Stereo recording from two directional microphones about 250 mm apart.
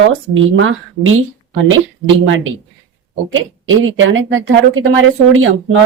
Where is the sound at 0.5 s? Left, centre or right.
Right.